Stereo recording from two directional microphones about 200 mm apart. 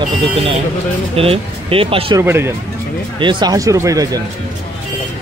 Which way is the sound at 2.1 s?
10° right (ahead or behind).